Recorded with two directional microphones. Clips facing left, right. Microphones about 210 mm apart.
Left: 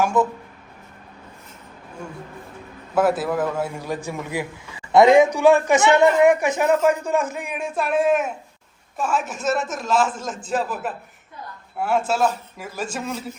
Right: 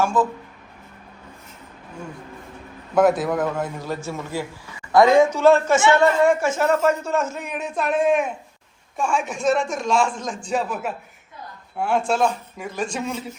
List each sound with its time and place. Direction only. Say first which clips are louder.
2.9 s a man's voice: right 2 dB; 5° left (ahead or behind)